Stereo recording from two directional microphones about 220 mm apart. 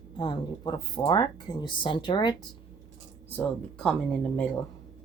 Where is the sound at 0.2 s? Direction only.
20° left (ahead or behind).